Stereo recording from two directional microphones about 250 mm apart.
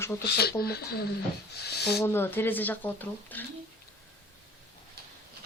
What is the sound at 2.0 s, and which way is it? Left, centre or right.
Speech, centre.